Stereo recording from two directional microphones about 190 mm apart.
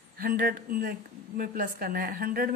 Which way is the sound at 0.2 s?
50° right (ahead or behind).